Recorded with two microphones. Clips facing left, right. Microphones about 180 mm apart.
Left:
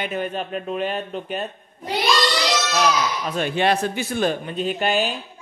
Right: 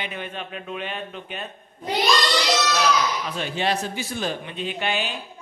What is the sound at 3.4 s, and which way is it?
Speech, 60° left (ahead or behind).